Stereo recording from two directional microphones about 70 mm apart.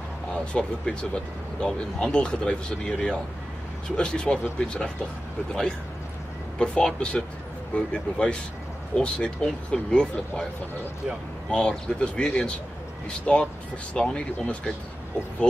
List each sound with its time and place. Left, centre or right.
0.3 s speech: centre
11.5 s speech: centre